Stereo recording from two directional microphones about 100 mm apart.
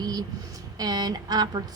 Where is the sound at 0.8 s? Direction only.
40° right (ahead or behind).